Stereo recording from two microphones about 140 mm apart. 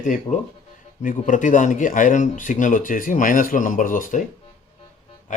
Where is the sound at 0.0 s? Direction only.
65° left (ahead or behind).